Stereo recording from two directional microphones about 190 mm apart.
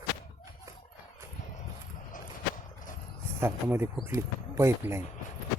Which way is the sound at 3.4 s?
15° right (ahead or behind).